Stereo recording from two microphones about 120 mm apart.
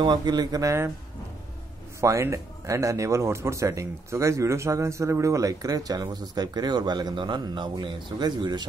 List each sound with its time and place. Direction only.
0.0 s speech: 40° right (ahead or behind)
2.0 s speech: 25° right (ahead or behind)